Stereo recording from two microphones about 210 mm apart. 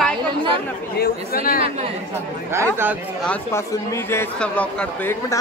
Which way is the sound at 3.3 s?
10° left (ahead or behind).